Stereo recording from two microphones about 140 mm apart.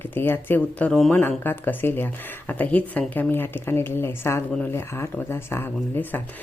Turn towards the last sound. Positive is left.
turn(degrees=15)  # may be behind; listen again after turning